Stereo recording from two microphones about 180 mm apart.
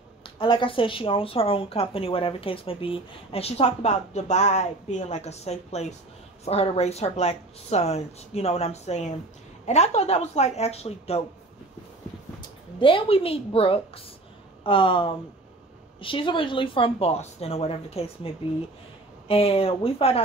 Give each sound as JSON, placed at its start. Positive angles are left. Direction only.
{"t": 0.2, "sound": "a woman's voice", "side_deg": 25}
{"t": 12.4, "sound": "a woman's voice", "side_deg": 30}